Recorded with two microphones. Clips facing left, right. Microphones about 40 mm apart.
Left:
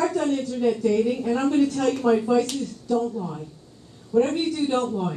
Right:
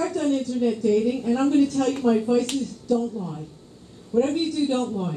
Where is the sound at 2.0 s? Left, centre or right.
Centre.